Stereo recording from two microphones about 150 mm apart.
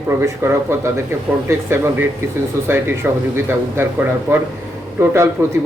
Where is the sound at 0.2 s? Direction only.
20° right (ahead or behind).